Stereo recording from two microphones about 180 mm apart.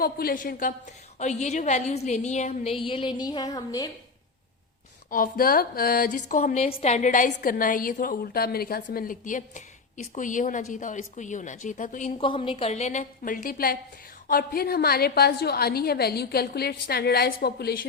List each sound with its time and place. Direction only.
0.0 s a woman's voice: 55° left (ahead or behind); by 3.8 s 20° left (ahead or behind)
5.1 s a woman's voice: 50° left (ahead or behind)